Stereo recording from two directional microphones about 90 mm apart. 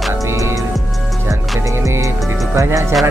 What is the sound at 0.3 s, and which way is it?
Music, 35° right (ahead or behind).